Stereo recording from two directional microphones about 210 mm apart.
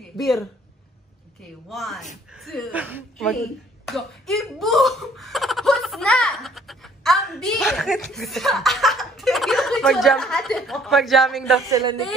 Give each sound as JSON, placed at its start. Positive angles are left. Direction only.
{"t": 0.2, "sound": "speech", "side_deg": 0}
{"t": 1.7, "sound": "speech", "side_deg": 0}
{"t": 11.7, "sound": "a man's voice", "side_deg": -20}